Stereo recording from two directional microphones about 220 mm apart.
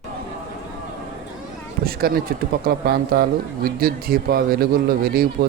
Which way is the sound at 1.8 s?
45° right (ahead or behind).